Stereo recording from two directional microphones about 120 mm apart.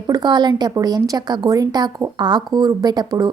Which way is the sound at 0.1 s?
35° right (ahead or behind).